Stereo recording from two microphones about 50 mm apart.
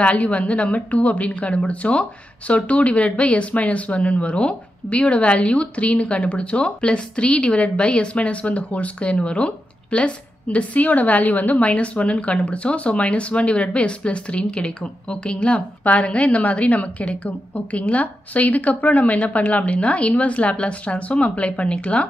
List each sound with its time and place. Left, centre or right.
0.0 s a woman's voice: left